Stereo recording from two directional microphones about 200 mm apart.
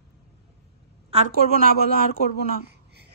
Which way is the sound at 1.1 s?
30° right (ahead or behind).